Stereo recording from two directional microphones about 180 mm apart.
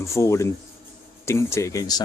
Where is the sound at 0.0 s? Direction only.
15° left (ahead or behind).